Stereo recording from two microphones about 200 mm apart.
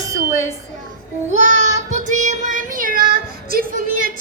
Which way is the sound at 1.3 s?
35° right (ahead or behind).